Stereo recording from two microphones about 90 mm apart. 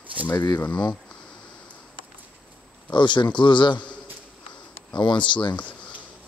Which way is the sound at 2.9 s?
60° left (ahead or behind).